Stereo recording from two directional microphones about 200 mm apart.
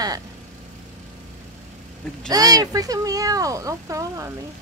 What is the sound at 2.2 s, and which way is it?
Speech, 20° right (ahead or behind).